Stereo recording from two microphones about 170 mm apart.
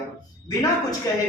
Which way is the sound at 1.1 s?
20° left (ahead or behind).